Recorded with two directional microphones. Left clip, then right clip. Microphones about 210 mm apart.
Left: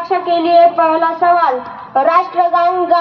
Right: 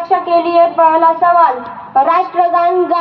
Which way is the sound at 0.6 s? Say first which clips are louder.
Even; 25° left (ahead or behind).